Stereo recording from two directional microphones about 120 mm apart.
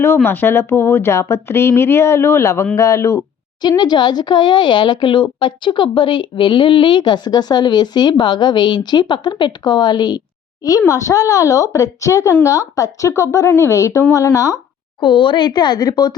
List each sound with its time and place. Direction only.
0.0 s speech: 20° left (ahead or behind)
3.6 s speech: 35° left (ahead or behind)
15.0 s speech: 40° left (ahead or behind)